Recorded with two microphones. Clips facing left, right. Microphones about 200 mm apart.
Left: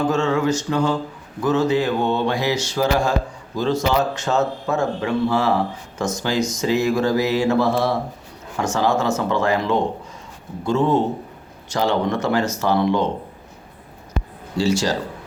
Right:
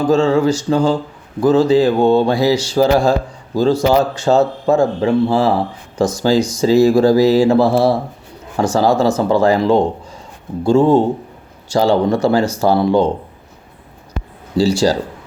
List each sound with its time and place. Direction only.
0.1 s a man's voice: 30° right (ahead or behind)
14.6 s speech: 35° right (ahead or behind)